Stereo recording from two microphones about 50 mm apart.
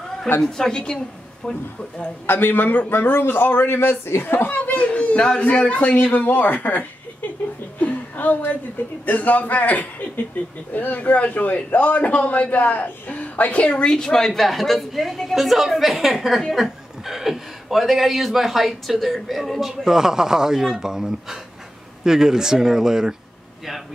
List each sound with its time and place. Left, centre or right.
0.4 s a woman's voice: centre
2.2 s a man's voice: left
4.6 s speech: left
7.8 s a sound: left
9.0 s a man's voice: left; by 23.1 s centre